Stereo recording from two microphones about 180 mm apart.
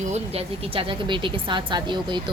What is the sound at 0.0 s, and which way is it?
Speech, 35° right (ahead or behind).